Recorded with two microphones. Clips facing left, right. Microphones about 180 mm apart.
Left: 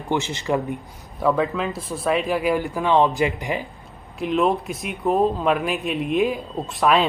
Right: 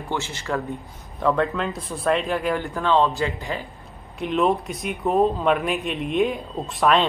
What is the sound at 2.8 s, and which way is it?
Speech, 15° left (ahead or behind).